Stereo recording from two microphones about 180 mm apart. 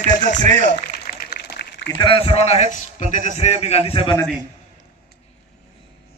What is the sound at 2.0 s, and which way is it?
A man's voice, 30° left (ahead or behind).